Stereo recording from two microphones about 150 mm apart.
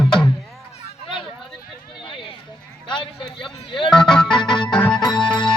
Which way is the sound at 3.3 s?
35° left (ahead or behind).